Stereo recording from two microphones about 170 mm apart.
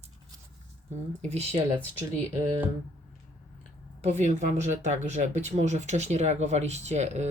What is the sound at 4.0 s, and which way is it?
Speech, 40° right (ahead or behind).